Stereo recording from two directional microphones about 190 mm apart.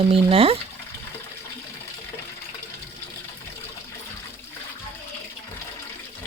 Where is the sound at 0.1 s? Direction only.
30° right (ahead or behind).